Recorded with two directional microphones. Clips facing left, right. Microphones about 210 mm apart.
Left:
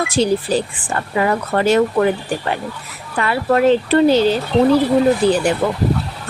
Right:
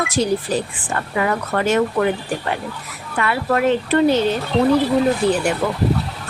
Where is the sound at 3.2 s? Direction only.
30° left (ahead or behind).